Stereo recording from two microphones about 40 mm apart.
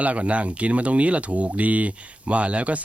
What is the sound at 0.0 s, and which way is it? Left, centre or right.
Speech, right.